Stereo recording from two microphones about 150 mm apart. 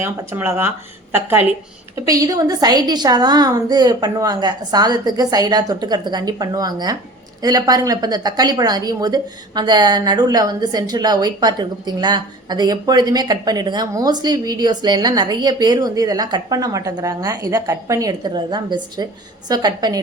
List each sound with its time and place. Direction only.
0.0 s speech: 15° right (ahead or behind)
2.0 s speech: 25° right (ahead or behind)